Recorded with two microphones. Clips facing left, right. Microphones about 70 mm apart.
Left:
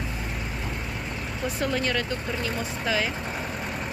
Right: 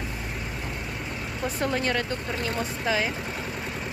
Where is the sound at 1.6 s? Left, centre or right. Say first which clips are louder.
Even; right.